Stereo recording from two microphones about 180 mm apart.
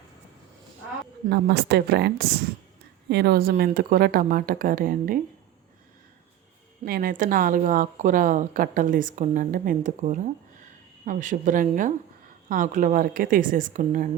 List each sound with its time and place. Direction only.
1.3 s a woman's voice: 65° right (ahead or behind)
6.8 s a woman's voice: 55° right (ahead or behind)